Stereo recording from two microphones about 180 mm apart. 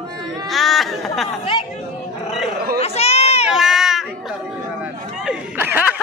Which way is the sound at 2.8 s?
35° left (ahead or behind).